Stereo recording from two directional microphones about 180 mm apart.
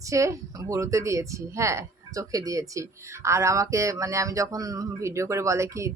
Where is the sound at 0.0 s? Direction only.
15° right (ahead or behind).